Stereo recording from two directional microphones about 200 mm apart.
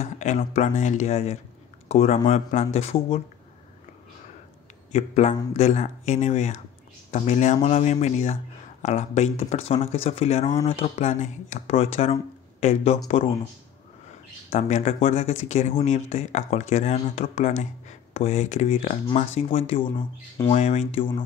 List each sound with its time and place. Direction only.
0.0 s speech: 35° left (ahead or behind)
4.9 s speech: 35° left (ahead or behind)
14.5 s speech: 35° left (ahead or behind)